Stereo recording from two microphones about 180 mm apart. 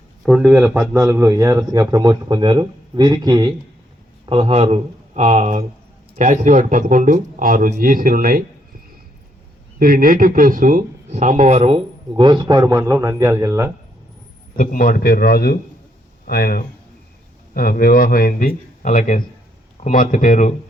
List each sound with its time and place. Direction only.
0.2 s speech: centre (ahead or behind)
1.0 s a man's voice: 15° right (ahead or behind); by 8.4 s 50° right (ahead or behind)
9.7 s speech: 50° right (ahead or behind); by 13.7 s 15° right (ahead or behind)
14.5 s a man's voice: 50° left (ahead or behind)